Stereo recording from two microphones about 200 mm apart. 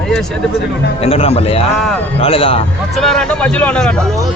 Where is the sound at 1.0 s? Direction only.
30° left (ahead or behind).